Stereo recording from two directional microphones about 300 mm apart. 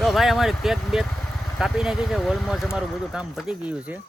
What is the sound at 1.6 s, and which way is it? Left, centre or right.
Speech, centre.